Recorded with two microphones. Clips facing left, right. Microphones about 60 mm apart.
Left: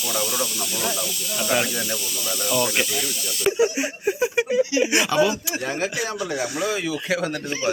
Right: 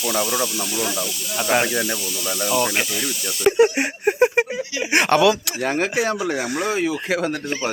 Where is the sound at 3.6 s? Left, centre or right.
Right.